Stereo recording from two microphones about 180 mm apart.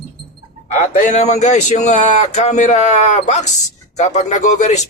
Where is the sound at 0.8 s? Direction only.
40° left (ahead or behind).